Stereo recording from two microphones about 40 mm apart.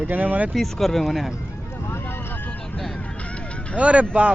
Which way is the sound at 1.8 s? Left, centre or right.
Left.